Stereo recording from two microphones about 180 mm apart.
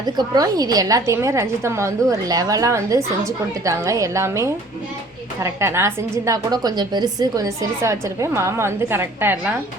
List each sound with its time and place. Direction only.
0.0 s a woman's voice: 20° right (ahead or behind)